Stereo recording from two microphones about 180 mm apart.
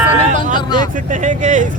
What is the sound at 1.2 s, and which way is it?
Speech, 45° right (ahead or behind).